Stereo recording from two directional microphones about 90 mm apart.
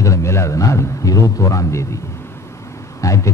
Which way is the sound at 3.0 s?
35° left (ahead or behind).